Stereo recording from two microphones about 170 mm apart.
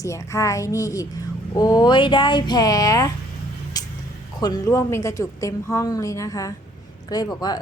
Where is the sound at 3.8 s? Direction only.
20° left (ahead or behind).